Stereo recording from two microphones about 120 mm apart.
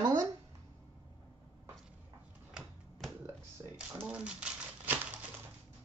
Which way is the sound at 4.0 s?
10° right (ahead or behind).